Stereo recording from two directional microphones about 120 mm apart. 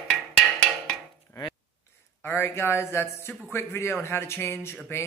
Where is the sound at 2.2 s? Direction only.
20° left (ahead or behind).